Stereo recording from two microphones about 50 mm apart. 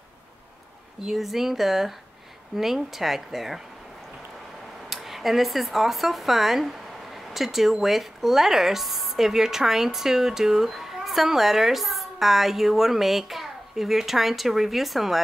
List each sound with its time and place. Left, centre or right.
1.0 s speech: centre
4.8 s speech: centre